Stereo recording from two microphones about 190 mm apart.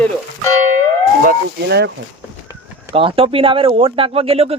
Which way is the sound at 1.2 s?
60° right (ahead or behind).